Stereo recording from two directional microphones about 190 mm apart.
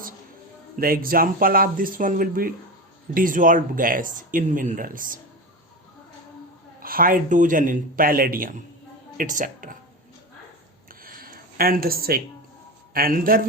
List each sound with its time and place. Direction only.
0.8 s speech: 50° right (ahead or behind)
6.7 s speech: 50° right (ahead or behind)
11.0 s a sound: 50° right (ahead or behind)
12.9 s speech: 50° right (ahead or behind)